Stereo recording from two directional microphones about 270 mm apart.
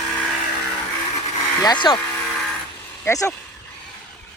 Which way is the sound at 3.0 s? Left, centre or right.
Centre.